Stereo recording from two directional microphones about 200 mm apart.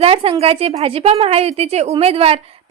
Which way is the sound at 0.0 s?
30° right (ahead or behind).